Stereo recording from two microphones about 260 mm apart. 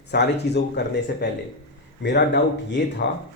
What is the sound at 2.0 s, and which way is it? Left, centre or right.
Speech, left.